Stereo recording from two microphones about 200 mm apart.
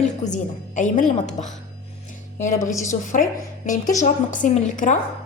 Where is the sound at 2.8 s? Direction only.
40° left (ahead or behind).